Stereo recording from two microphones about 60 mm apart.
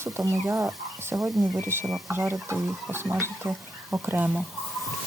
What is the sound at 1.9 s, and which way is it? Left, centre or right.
Speech, centre.